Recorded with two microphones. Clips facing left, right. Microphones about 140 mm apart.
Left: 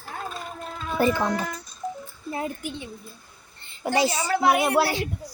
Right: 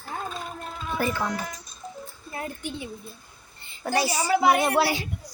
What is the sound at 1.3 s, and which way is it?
Speech, 60° left (ahead or behind).